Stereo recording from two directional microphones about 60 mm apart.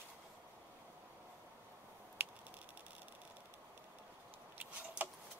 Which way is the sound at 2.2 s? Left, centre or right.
Right.